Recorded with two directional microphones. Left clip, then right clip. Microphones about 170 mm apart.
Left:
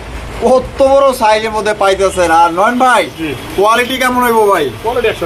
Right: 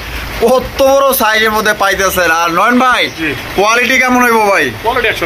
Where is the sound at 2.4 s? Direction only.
25° right (ahead or behind).